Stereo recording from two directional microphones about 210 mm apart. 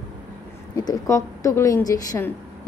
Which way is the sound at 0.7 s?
15° left (ahead or behind).